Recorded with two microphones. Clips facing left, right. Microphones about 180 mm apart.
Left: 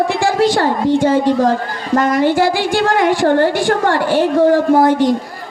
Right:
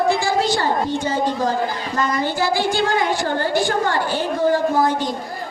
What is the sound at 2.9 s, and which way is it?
A woman's voice, 75° left (ahead or behind).